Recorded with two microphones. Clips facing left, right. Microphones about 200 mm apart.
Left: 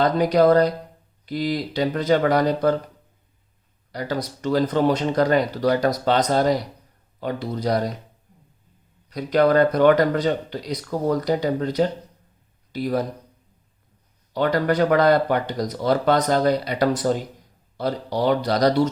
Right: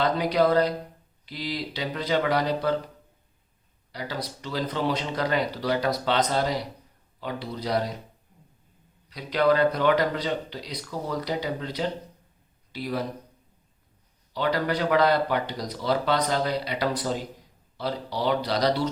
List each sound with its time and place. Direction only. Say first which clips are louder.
0.0 s speech: left 5 dB; 45° left (ahead or behind)
3.9 s speech: left 7 dB; 45° left (ahead or behind)
9.0 s speech: left 4 dB; 45° left (ahead or behind)
14.3 s speech: left 6 dB; 50° left (ahead or behind)